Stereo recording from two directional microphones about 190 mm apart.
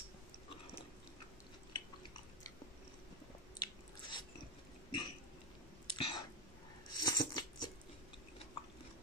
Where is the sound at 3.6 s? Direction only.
25° left (ahead or behind).